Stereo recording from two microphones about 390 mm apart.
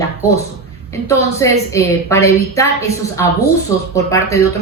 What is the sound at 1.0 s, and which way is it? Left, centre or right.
A woman's voice, centre.